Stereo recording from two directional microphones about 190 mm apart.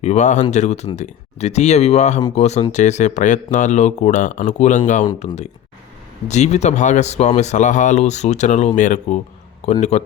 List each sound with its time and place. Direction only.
0.0 s speech: 35° left (ahead or behind)